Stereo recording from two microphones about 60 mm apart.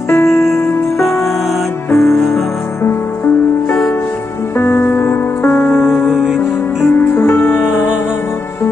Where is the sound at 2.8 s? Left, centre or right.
Left.